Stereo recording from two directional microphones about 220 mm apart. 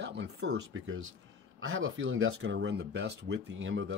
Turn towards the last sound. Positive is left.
turn(degrees=-60)  # may be behind; listen again after turning